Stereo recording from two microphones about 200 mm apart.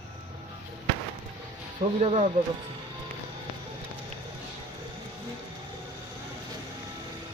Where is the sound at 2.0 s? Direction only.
30° right (ahead or behind).